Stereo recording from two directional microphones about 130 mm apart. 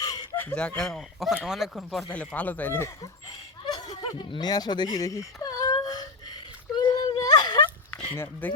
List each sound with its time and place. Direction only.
0.3 s a man's voice: 10° left (ahead or behind)
2.3 s speech: 10° left (ahead or behind); by 3.8 s 30° left (ahead or behind)
3.8 s baby cry: 45° left (ahead or behind)
8.1 s speech: 15° left (ahead or behind)